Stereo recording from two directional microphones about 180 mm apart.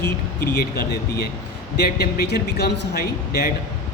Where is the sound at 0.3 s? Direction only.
60° left (ahead or behind).